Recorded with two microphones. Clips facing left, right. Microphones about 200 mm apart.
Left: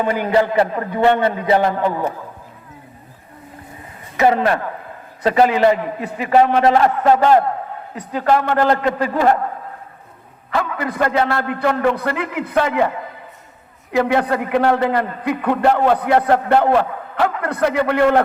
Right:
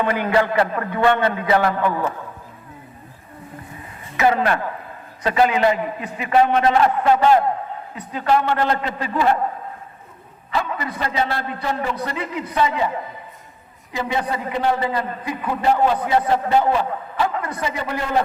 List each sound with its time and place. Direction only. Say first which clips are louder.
0.4 s a man's voice: left 2 dB; 20° left (ahead or behind)
4.2 s a man's voice: left 3 dB; 40° left (ahead or behind)
10.5 s a man's voice: left 3 dB; 55° left (ahead or behind)
13.9 s a man's voice: left 7 dB; 65° left (ahead or behind)